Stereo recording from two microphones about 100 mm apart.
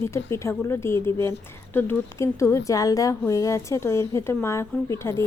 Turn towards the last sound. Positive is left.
turn(degrees=25)  # may be behind; listen again after turning